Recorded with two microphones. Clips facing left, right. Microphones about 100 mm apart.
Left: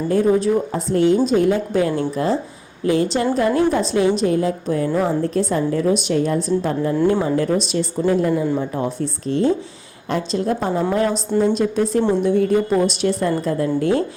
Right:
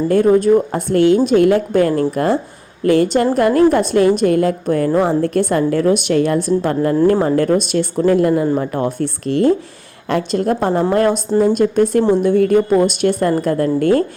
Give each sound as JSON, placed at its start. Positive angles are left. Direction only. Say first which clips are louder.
{"t": 0.3, "sound": "a woman's voice", "louder": "right 5 dB", "side_deg": -50}
{"t": 7.0, "sound": "a woman's voice", "louder": "right 4 dB", "side_deg": -45}